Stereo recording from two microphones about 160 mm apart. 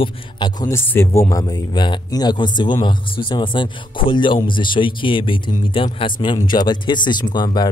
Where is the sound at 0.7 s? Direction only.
15° left (ahead or behind).